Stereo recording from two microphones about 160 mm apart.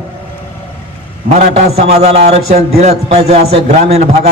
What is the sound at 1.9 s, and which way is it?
A man's voice, 40° right (ahead or behind).